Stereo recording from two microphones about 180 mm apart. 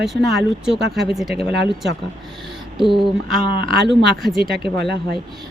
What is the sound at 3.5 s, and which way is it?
Speech, 60° right (ahead or behind).